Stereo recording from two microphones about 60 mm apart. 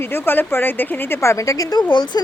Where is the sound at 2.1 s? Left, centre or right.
Left.